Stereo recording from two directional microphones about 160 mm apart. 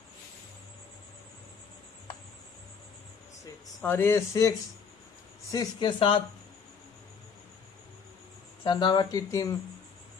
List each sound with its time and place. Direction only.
3.8 s a man's voice: 15° left (ahead or behind); by 6.2 s 35° left (ahead or behind)
8.6 s speech: 30° left (ahead or behind)